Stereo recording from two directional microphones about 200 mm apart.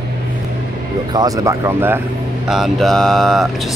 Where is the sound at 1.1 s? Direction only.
20° right (ahead or behind).